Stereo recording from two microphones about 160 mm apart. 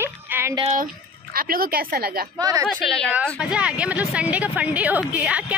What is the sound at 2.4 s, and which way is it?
Speech, 20° right (ahead or behind).